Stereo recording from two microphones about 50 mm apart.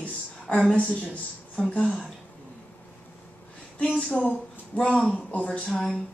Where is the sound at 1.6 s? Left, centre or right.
Left.